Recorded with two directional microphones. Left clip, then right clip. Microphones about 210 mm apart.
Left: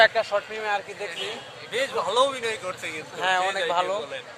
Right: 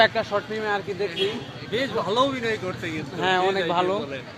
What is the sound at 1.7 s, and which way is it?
A man's voice, 20° left (ahead or behind).